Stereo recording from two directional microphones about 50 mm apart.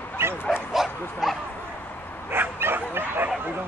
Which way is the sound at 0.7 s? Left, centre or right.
Centre.